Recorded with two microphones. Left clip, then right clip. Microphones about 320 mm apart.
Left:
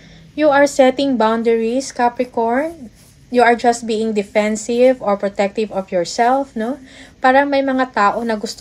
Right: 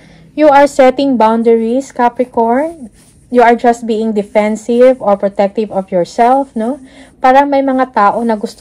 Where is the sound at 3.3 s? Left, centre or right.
Centre.